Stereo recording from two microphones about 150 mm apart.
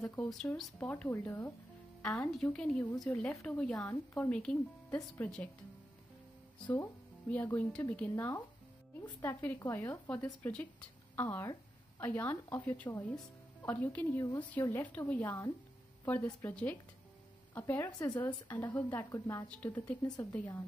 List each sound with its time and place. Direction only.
0.2 s a woman's voice: 5° left (ahead or behind)
2.0 s a woman's voice: 5° left (ahead or behind)
3.7 s a woman's voice: 20° left (ahead or behind)
4.2 s a woman's voice: 5° left (ahead or behind)
7.2 s a woman's voice: 10° left (ahead or behind)
17.8 s a woman's voice: 25° left (ahead or behind)
18.1 s a woman's voice: 15° left (ahead or behind)
19.5 s a woman's voice: 10° left (ahead or behind)